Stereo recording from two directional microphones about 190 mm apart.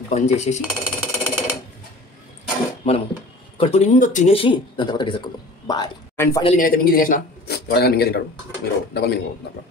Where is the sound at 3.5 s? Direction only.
30° left (ahead or behind); by 6.4 s 15° left (ahead or behind).